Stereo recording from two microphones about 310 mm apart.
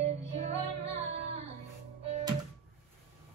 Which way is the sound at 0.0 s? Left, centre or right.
Right.